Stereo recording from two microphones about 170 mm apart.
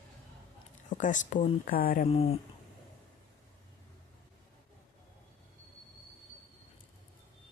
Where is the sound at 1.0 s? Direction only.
45° left (ahead or behind).